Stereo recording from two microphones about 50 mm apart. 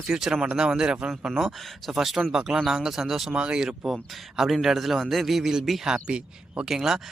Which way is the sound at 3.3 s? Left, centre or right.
Right.